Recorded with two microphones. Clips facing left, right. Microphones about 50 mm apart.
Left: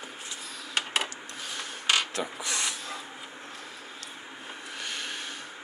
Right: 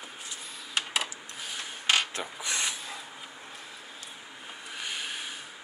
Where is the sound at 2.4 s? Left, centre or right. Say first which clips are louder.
Even; right.